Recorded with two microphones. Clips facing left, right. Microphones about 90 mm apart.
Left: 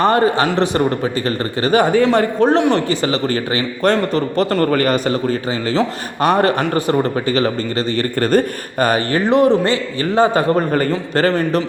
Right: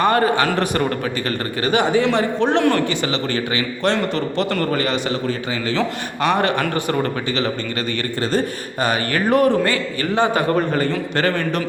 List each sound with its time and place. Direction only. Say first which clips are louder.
0.0 s a man's voice: left 2 dB; 30° left (ahead or behind)
1.6 s a man's voice: left 4 dB; 40° left (ahead or behind)
2.6 s a man's voice: left 2 dB; 25° left (ahead or behind)
2.9 s a man's voice: left 4 dB; 40° left (ahead or behind)
6.2 s a man's voice: left 4 dB; 40° left (ahead or behind)
8.2 s speech: left 5 dB; 55° left (ahead or behind)
9.3 s a man's voice: left 3 dB; 25° left (ahead or behind)